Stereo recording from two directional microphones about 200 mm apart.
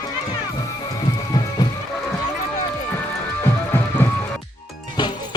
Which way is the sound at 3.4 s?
10° left (ahead or behind).